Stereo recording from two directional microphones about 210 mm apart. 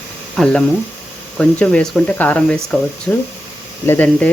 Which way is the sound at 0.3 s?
5° left (ahead or behind).